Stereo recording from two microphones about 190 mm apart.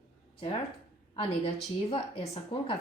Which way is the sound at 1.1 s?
30° left (ahead or behind).